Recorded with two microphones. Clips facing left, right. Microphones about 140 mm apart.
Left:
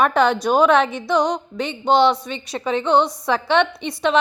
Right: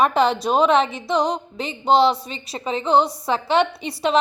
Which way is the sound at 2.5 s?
30° right (ahead or behind).